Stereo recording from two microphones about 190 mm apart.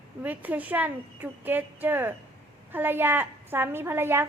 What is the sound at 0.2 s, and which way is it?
A woman's voice, 10° right (ahead or behind).